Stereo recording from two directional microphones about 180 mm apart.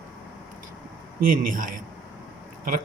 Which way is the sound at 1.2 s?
50° right (ahead or behind).